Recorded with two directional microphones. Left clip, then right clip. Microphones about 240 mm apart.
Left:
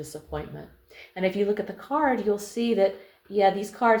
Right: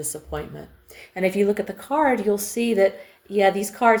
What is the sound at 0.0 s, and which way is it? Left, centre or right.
Speech, right.